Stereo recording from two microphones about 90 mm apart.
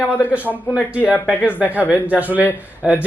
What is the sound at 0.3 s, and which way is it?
Speech, 15° right (ahead or behind).